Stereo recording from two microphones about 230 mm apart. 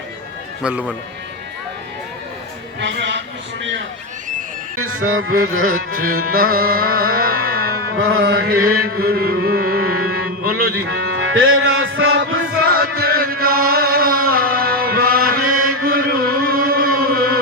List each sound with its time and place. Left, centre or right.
0.6 s speech: centre
2.8 s a man's voice: right
4.8 s music: right
5.7 s music: right
7.9 s music: right
8.2 s a man's voice: right
8.8 s music: right
11.1 s music: right
12.6 s chant: right
15.8 s a sound: right